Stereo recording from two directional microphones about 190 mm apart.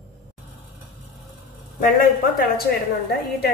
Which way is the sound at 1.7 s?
50° left (ahead or behind).